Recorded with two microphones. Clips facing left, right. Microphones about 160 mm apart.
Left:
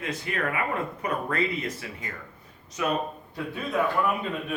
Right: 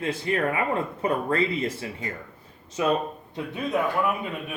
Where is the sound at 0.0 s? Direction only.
30° right (ahead or behind).